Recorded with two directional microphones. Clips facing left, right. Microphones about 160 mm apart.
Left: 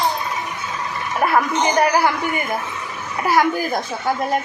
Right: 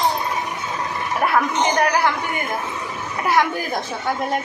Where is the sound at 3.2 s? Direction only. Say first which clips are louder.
Left 2 dB; centre (ahead or behind).